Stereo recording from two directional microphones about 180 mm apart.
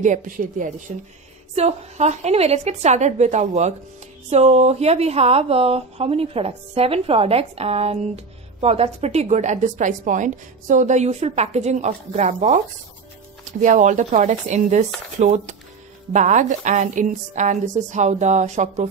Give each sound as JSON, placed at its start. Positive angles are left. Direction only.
{"t": 0.0, "sound": "a woman's voice", "side_deg": -45}